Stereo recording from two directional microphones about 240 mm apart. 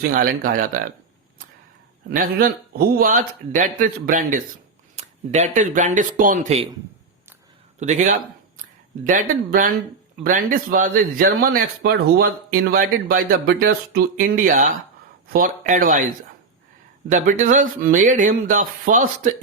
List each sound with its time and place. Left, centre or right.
0.0 s a man's voice: right
2.0 s a man's voice: right
7.8 s a man's voice: right
17.1 s a man's voice: right